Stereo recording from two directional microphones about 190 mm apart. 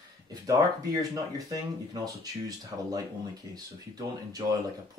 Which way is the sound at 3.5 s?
20° right (ahead or behind).